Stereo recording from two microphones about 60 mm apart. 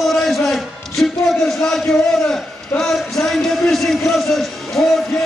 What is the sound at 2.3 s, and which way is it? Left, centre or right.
A man's voice, centre.